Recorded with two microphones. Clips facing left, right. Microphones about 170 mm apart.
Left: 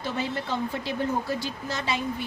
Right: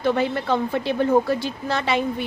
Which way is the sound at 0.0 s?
60° right (ahead or behind).